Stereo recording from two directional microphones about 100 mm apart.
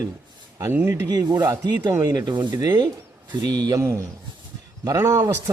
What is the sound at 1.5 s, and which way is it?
Speech, 30° right (ahead or behind).